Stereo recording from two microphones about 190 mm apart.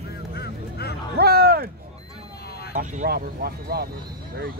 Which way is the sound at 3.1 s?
55° right (ahead or behind).